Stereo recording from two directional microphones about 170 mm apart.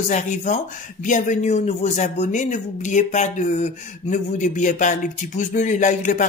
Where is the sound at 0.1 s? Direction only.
45° left (ahead or behind).